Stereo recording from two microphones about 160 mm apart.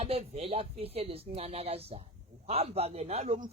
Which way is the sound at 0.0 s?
40° right (ahead or behind).